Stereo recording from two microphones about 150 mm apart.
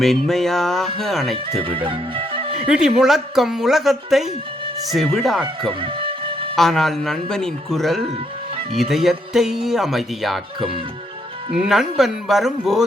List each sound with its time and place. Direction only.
0.0 s speech: centre (ahead or behind)
1.5 s speech: 40° right (ahead or behind)
1.9 s music: 35° right (ahead or behind)
2.6 s speech: 5° right (ahead or behind)
5.8 s music: 35° right (ahead or behind)
6.6 s speech: centre (ahead or behind)